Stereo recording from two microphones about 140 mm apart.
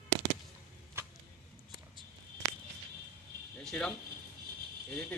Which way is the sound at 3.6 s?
5° left (ahead or behind).